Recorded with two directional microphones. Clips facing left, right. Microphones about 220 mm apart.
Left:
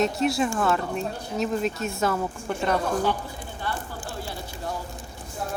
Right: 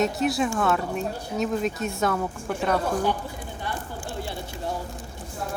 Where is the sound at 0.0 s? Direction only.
Centre (ahead or behind).